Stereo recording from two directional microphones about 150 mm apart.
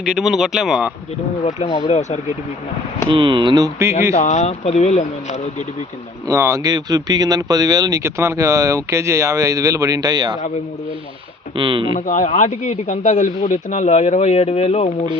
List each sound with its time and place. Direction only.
0.0 s speech: 5° right (ahead or behind)
1.5 s speech: 50° left (ahead or behind)
3.1 s speech: 35° right (ahead or behind)
4.1 s speech: 50° left (ahead or behind)
6.2 s speech: 20° right (ahead or behind)
11.5 s speech: 35° right (ahead or behind)
11.9 s speech: 55° left (ahead or behind)